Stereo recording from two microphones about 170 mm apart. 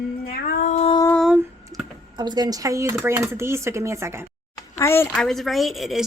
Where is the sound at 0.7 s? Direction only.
35° left (ahead or behind).